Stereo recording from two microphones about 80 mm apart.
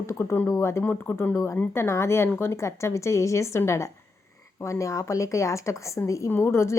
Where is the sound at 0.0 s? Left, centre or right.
Left.